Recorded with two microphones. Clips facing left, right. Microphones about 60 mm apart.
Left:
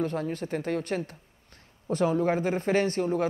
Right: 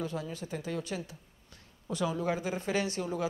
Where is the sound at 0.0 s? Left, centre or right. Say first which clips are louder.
Left 7 dB; left.